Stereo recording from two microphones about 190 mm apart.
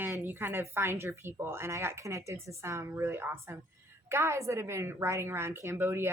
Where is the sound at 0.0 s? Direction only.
10° right (ahead or behind).